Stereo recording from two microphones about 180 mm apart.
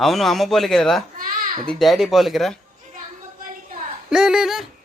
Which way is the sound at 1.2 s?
50° right (ahead or behind).